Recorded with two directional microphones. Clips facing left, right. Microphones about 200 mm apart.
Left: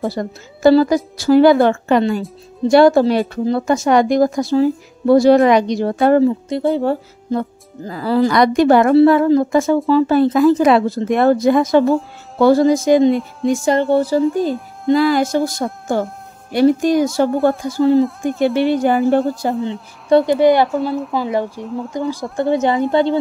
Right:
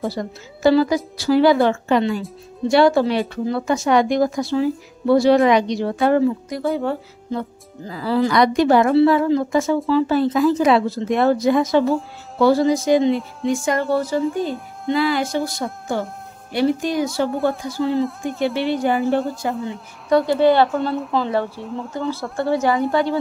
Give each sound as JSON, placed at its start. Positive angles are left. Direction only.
{"t": 0.1, "sound": "speech", "side_deg": 50}
{"t": 6.2, "sound": "a woman's voice", "side_deg": 25}
{"t": 6.8, "sound": "speech", "side_deg": 40}
{"t": 13.5, "sound": "a woman's voice", "side_deg": 30}
{"t": 14.9, "sound": "speech", "side_deg": 40}
{"t": 17.9, "sound": "a woman's voice", "side_deg": 0}
{"t": 18.9, "sound": "speech", "side_deg": 45}
{"t": 19.4, "sound": "a woman's voice", "side_deg": 25}
{"t": 20.2, "sound": "speech", "side_deg": 15}
{"t": 20.7, "sound": "a woman's voice", "side_deg": 0}
{"t": 21.9, "sound": "a woman's voice", "side_deg": 15}